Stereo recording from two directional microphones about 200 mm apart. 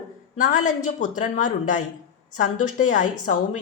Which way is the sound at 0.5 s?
40° left (ahead or behind).